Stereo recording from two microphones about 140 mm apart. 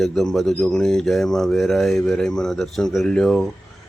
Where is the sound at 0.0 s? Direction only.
Centre (ahead or behind).